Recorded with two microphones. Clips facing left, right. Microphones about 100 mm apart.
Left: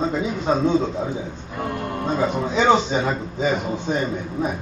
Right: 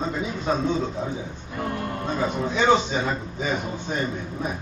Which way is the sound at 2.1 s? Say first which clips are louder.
Left 3 dB; 25° left (ahead or behind).